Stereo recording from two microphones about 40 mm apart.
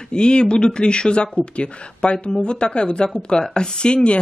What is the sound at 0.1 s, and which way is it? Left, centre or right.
Speech, left.